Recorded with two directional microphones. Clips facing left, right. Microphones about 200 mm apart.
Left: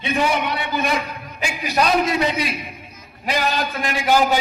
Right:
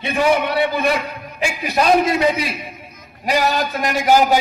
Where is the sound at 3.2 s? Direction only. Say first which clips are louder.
Right 4 dB; 40° right (ahead or behind).